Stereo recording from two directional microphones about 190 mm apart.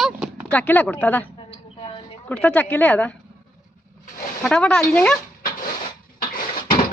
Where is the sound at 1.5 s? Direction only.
25° left (ahead or behind).